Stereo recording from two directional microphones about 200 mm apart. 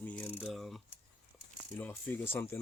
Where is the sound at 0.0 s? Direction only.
5° left (ahead or behind).